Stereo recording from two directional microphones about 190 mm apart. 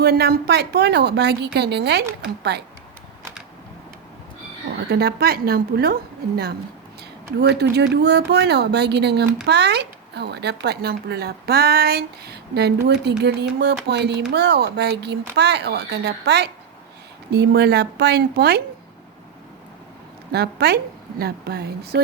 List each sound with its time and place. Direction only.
0.0 s speech: 55° right (ahead or behind)
4.9 s speech: 55° right (ahead or behind)
20.3 s speech: 55° right (ahead or behind)